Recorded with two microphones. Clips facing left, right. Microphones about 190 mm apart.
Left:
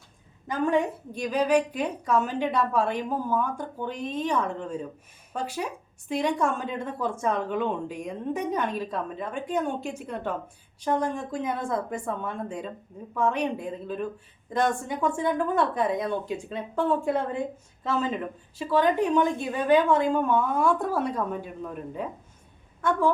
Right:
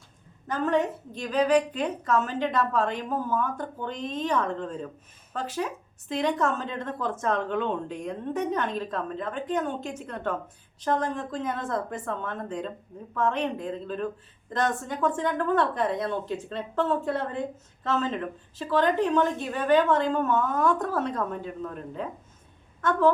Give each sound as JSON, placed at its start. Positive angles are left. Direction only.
{"t": 0.4, "sound": "a woman's voice", "side_deg": 10}